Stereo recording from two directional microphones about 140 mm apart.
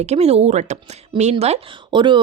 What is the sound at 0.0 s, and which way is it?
Speech, 50° right (ahead or behind).